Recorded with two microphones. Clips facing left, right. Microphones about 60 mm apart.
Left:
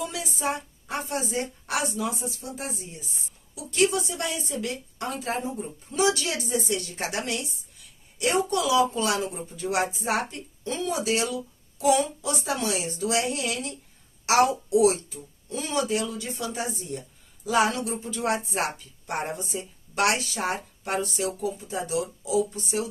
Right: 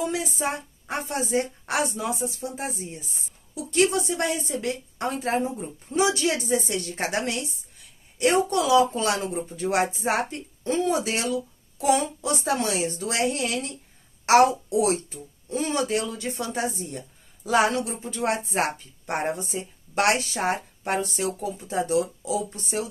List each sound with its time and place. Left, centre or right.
0.0 s a woman's voice: right
3.5 s a woman's voice: right